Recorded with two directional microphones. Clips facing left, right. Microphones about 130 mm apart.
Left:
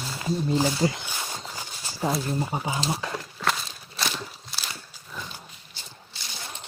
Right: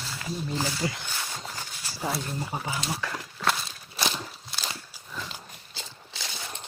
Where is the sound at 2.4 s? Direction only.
20° left (ahead or behind).